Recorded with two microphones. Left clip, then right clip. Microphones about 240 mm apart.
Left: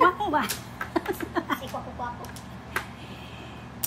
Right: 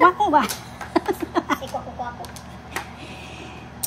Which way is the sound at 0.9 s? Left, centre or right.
Right.